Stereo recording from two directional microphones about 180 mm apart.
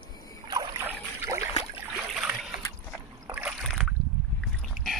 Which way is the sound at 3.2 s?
10° right (ahead or behind).